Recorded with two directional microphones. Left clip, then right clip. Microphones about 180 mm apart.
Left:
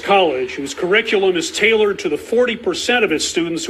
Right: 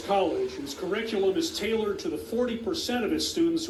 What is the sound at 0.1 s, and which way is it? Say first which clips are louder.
Speech: left 11 dB; 15° left (ahead or behind).